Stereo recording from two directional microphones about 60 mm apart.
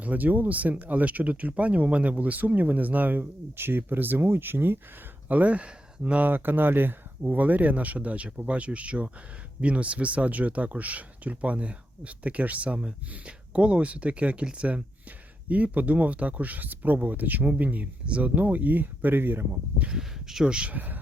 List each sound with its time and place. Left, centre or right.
0.0 s speech: right
5.3 s speech: right
6.2 s speech: right
20.0 s speech: centre; by 21.0 s right